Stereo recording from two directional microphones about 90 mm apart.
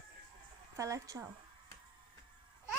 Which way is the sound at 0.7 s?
35° right (ahead or behind).